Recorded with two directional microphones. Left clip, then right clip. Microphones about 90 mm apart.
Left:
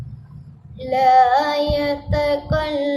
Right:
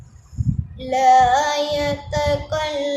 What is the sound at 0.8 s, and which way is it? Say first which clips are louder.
Child singing: even; 20° right (ahead or behind).